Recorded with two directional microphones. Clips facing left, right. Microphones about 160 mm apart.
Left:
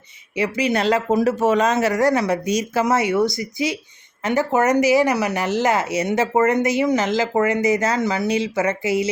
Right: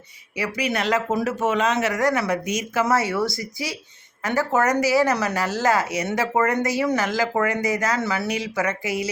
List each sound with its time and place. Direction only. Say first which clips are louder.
0.3 s speech: left 5 dB; 25° left (ahead or behind)
2.8 s speech: left 3 dB; 20° left (ahead or behind)